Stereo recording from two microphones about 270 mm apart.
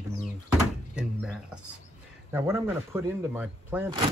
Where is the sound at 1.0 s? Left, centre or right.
Centre.